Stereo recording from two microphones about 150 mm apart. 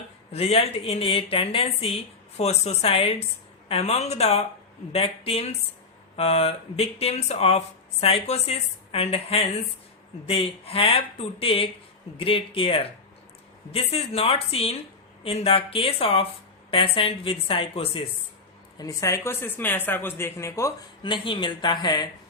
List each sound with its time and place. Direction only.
0.3 s speech: 45° left (ahead or behind)
18.8 s speech: 20° left (ahead or behind)
21.0 s speech: 35° left (ahead or behind)